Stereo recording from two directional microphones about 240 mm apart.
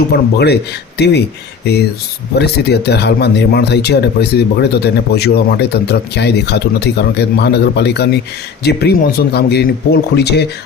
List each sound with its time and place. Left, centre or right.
0.1 s speech: left
2.4 s speech: left